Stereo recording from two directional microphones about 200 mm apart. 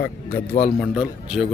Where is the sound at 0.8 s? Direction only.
5° right (ahead or behind).